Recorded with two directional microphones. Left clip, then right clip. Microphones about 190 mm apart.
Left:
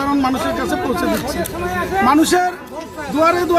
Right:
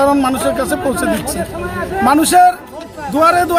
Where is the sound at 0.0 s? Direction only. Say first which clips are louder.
Right 5 dB; 20° right (ahead or behind).